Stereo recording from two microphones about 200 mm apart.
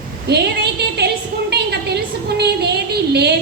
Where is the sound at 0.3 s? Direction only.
55° right (ahead or behind).